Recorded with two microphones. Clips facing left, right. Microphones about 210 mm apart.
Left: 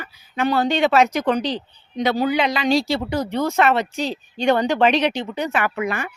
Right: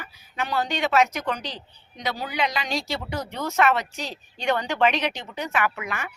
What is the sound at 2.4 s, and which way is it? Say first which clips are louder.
Speech: left 5 dB; 75° left (ahead or behind).